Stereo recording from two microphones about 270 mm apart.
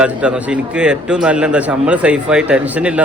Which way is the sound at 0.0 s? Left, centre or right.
Centre.